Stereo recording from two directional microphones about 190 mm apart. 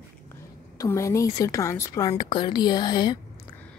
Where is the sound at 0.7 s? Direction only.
15° left (ahead or behind).